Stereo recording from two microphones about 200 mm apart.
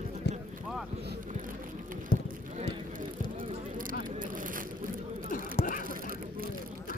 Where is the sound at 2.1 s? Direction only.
45° left (ahead or behind).